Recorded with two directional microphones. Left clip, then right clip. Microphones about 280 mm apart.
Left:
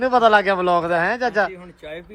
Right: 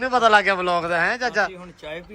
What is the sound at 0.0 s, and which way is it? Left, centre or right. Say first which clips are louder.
Speech: left 2 dB; centre.